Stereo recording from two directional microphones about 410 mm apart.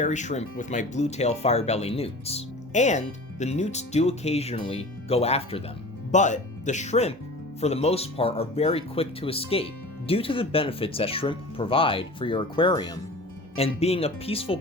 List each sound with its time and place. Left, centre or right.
0.0 s speech: centre